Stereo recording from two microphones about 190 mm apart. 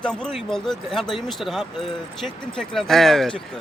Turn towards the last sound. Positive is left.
turn(degrees=5)  # may be behind; listen again after turning